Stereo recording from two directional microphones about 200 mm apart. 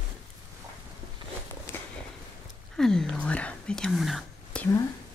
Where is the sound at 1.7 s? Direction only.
10° left (ahead or behind).